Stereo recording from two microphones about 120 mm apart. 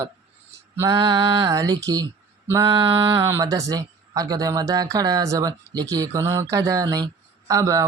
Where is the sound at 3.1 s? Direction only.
25° right (ahead or behind).